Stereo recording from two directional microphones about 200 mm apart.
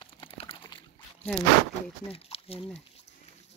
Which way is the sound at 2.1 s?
30° left (ahead or behind).